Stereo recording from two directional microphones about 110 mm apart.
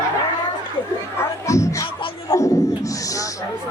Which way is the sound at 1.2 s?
30° left (ahead or behind).